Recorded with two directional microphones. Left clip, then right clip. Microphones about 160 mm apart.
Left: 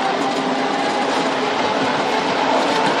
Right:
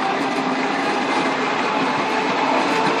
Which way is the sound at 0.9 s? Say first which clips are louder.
Left 1 dB; 30° right (ahead or behind).